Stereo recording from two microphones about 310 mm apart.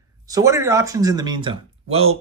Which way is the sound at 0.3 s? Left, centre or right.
Centre.